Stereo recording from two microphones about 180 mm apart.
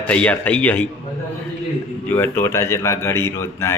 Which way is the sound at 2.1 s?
10° left (ahead or behind).